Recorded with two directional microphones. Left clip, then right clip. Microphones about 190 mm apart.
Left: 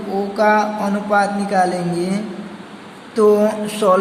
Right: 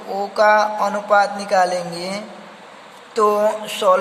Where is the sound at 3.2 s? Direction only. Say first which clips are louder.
Left 2 dB; 25° right (ahead or behind).